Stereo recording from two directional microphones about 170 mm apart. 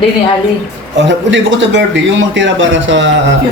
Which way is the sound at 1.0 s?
90° right.